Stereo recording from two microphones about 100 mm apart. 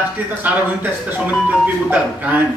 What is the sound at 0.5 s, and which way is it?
Speech, 15° right (ahead or behind).